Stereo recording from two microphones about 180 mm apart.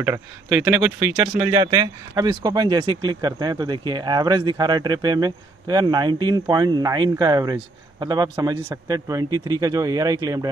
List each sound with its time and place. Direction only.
0.0 s speech: 15° right (ahead or behind)
1.4 s speech: 25° right (ahead or behind)